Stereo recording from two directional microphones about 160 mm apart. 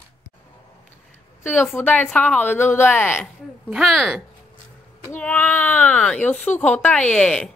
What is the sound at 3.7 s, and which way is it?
Speech, centre (ahead or behind).